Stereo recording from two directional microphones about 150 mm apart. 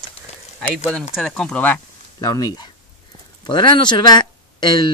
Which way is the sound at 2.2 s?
25° left (ahead or behind).